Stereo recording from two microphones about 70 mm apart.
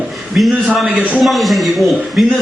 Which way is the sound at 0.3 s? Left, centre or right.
Centre.